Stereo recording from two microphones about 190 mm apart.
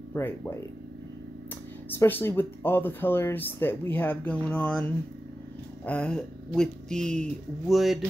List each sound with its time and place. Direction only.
2.0 s speech: 10° left (ahead or behind)